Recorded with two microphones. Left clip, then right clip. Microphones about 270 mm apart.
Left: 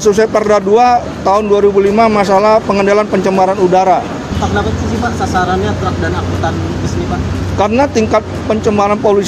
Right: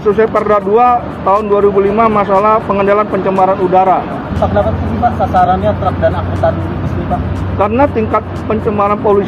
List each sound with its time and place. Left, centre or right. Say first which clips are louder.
0.2 s speech: even; left
7.5 s speech: even; left